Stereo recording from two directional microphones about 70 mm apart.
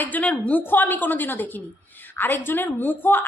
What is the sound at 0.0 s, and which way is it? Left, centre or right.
A woman's voice, left.